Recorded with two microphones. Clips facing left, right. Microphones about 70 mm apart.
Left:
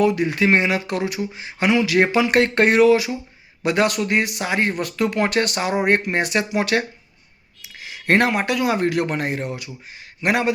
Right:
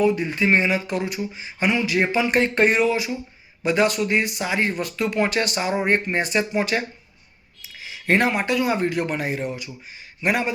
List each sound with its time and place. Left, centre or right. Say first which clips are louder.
0.0 s a man's voice: left 2 dB; left